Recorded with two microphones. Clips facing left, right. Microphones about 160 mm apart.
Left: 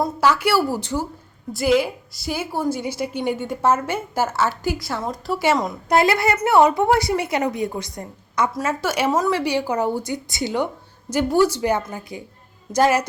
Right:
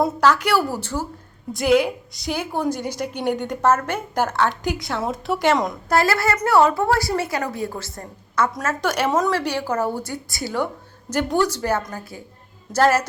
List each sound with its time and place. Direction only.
0.2 s a woman's voice: 10° left (ahead or behind)
5.9 s a woman's voice: 20° left (ahead or behind)